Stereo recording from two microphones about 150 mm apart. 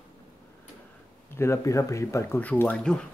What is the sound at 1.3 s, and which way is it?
Speech, 20° left (ahead or behind).